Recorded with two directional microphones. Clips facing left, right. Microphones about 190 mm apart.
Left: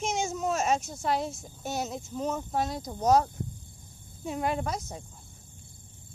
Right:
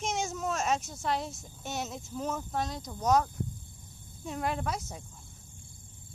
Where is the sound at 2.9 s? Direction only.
35° left (ahead or behind).